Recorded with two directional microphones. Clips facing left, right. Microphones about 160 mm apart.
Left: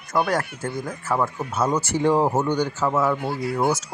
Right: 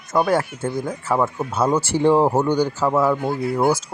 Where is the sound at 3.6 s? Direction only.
30° right (ahead or behind).